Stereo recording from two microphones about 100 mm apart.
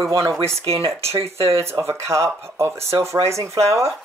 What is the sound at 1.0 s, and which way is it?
Speech, 85° right.